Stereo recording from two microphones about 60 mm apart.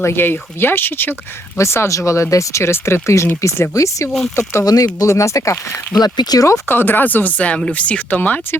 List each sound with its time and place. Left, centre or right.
0.0 s speech: left
1.5 s speech: left
4.6 s speech: left
5.1 s speech: left
5.9 s speech: left
6.7 s speech: left